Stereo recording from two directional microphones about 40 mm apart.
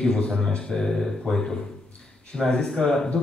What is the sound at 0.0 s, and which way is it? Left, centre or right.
A man's voice, centre.